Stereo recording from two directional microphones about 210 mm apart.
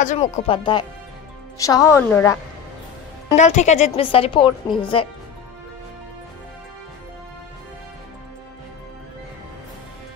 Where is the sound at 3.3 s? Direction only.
35° left (ahead or behind).